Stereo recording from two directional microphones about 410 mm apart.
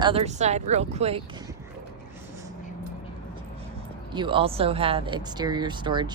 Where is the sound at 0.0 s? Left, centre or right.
Centre.